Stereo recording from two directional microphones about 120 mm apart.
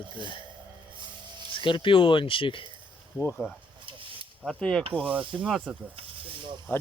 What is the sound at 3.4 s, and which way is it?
Speech, 20° left (ahead or behind).